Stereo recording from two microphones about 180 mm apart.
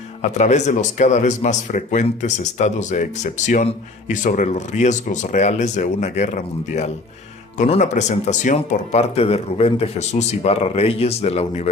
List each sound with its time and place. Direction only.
0.2 s speech: 40° left (ahead or behind)